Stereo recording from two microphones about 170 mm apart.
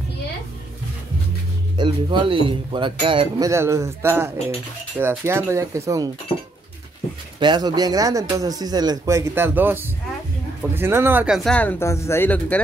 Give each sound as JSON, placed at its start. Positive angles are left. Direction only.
{"t": 1.8, "sound": "speech", "side_deg": -30}
{"t": 7.3, "sound": "speech", "side_deg": -25}